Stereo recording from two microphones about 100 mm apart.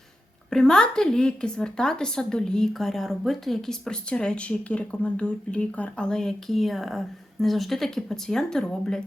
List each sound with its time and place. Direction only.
0.5 s a woman's voice: 10° left (ahead or behind)